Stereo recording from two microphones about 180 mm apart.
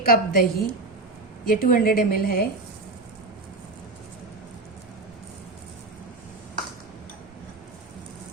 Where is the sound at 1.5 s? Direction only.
55° left (ahead or behind).